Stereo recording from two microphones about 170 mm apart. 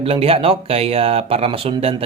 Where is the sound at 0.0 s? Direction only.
35° right (ahead or behind).